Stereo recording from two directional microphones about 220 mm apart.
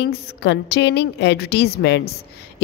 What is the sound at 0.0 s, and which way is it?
Speech, 50° left (ahead or behind).